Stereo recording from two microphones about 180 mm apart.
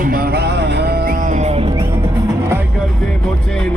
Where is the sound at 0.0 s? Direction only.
55° right (ahead or behind); by 1.9 s 30° right (ahead or behind).